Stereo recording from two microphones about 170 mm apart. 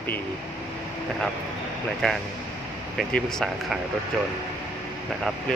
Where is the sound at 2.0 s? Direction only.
5° left (ahead or behind).